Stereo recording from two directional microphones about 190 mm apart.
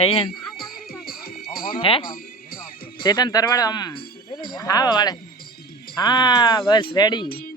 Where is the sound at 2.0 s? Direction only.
50° left (ahead or behind).